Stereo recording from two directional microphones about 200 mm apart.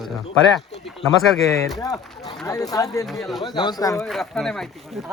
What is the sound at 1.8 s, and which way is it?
Speech, 20° left (ahead or behind).